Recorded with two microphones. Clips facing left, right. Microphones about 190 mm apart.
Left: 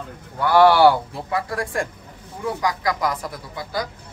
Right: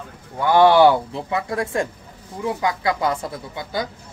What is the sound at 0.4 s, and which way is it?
A man's voice, 20° right (ahead or behind).